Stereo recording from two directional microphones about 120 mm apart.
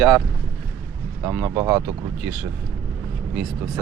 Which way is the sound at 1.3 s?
15° right (ahead or behind).